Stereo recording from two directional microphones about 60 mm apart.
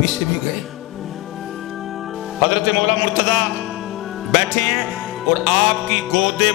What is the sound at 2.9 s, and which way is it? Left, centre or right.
Music, centre.